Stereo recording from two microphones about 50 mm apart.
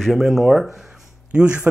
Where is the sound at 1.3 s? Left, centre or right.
Right.